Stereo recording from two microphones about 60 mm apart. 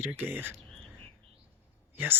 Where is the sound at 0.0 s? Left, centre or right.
Right.